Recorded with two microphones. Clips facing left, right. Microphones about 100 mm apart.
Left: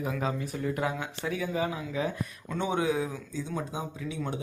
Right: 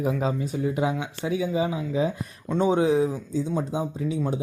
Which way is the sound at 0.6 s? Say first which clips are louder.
Right 4 dB; 15° right (ahead or behind).